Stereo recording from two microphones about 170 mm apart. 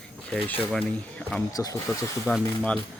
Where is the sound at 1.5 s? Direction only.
20° left (ahead or behind).